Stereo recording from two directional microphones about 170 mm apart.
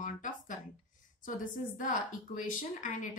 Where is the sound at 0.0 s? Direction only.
50° left (ahead or behind).